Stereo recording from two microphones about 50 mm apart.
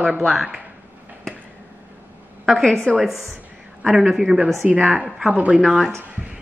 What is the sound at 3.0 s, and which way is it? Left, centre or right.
A woman's voice, centre.